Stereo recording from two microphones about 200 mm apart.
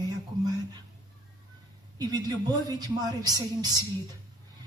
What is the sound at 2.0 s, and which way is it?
A woman's voice, 20° right (ahead or behind).